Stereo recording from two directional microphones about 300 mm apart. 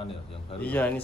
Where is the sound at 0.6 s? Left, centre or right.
Centre.